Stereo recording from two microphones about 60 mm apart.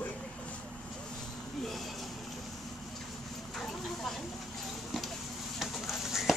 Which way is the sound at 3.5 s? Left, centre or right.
Centre.